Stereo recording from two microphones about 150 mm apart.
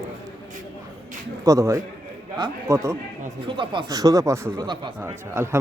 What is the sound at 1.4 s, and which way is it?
A man's voice, 20° right (ahead or behind).